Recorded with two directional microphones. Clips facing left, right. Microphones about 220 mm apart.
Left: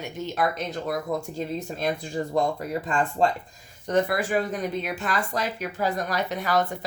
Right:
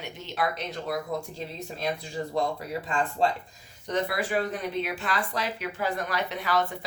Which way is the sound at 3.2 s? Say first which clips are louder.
Left 3 dB; 50° left (ahead or behind).